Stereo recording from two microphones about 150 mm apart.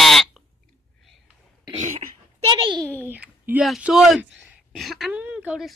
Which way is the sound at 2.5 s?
30° right (ahead or behind).